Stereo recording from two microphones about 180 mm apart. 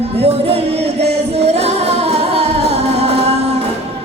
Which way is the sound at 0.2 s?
35° right (ahead or behind).